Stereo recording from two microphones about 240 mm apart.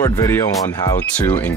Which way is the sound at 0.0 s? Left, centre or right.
Centre.